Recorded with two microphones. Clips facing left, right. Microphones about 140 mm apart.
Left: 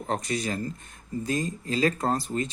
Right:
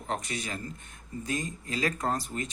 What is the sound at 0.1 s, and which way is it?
Speech, 35° left (ahead or behind).